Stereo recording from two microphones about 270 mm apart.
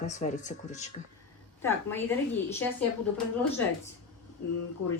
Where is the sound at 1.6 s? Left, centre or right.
Centre.